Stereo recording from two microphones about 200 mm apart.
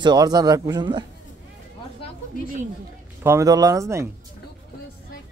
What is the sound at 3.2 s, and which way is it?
Speech, 15° right (ahead or behind).